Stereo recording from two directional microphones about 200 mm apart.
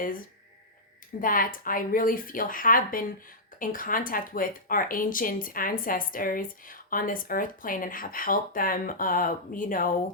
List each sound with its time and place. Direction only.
1.2 s speech: 45° left (ahead or behind)